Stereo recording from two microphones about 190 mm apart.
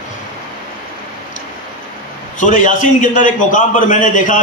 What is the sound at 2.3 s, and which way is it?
A man's voice, 40° left (ahead or behind).